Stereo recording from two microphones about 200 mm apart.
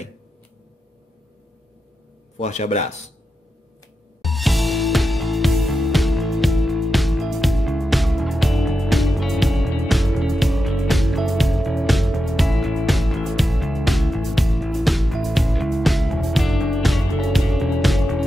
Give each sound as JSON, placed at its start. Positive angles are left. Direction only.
{"t": 2.3, "sound": "a man's voice", "side_deg": 35}
{"t": 4.2, "sound": "music", "side_deg": 0}